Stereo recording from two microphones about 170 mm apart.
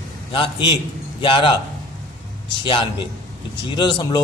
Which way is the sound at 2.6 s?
30° left (ahead or behind).